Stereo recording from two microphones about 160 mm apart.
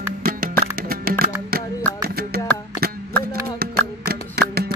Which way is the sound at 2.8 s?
70° right (ahead or behind).